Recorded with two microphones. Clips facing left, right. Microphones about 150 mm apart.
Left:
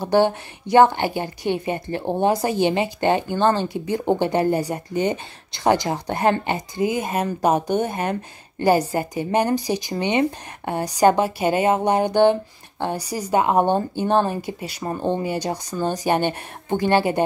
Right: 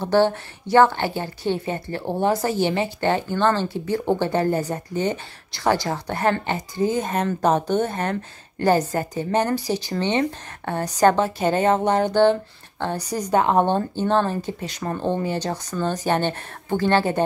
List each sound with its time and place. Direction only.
0.0 s a woman's voice: 15° left (ahead or behind)